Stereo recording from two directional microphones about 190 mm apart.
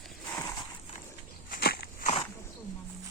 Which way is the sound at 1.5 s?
55° left (ahead or behind).